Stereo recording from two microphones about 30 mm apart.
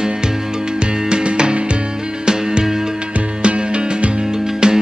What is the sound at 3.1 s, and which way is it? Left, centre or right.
Music, right.